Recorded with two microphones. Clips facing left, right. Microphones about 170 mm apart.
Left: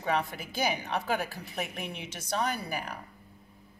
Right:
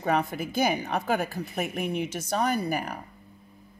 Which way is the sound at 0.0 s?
45° right (ahead or behind).